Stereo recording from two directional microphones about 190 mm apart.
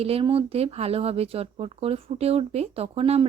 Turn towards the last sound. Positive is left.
turn(degrees=-30)  # may be behind; listen again after turning